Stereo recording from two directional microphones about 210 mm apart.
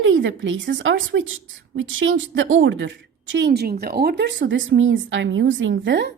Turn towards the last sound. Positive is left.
turn(degrees=-55)  # may be behind; listen again after turning